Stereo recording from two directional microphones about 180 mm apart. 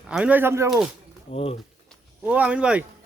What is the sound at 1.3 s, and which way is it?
Speech, 35° left (ahead or behind).